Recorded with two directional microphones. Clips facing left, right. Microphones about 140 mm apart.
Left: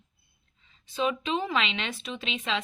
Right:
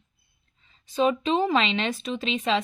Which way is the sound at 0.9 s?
40° right (ahead or behind).